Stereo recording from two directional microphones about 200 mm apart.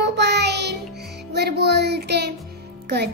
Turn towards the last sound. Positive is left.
turn(degrees=-55)  # may be behind; listen again after turning